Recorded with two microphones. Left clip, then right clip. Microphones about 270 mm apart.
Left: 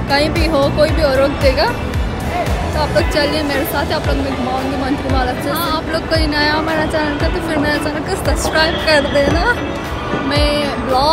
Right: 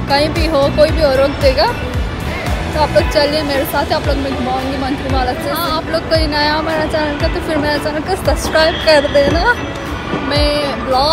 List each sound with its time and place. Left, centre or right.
0.1 s speech: centre
2.8 s speech: centre